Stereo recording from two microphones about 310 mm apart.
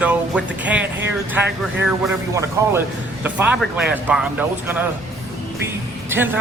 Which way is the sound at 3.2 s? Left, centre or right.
Centre.